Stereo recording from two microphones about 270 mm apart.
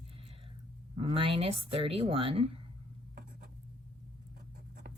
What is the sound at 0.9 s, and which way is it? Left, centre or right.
Speech, right.